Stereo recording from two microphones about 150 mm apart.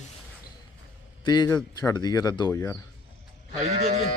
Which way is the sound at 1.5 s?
15° left (ahead or behind).